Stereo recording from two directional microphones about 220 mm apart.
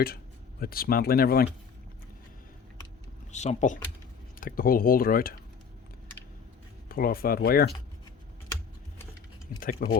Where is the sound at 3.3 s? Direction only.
30° left (ahead or behind).